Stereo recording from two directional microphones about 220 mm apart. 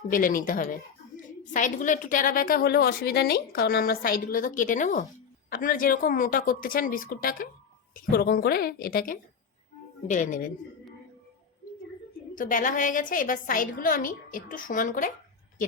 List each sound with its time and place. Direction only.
0.1 s a woman's voice: 40° left (ahead or behind)
12.3 s a woman's voice: 35° left (ahead or behind)